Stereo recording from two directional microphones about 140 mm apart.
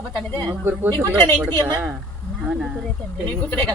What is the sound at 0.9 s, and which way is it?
Speech, 30° right (ahead or behind).